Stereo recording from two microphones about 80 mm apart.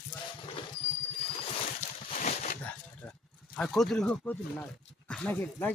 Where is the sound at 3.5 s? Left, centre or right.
Centre.